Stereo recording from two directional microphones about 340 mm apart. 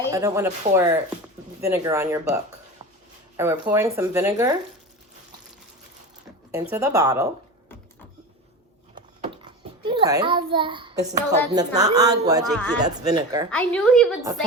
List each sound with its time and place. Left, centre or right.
0.1 s speech: centre
6.5 s speech: centre
9.8 s a child's voice: centre
13.5 s a woman's voice: centre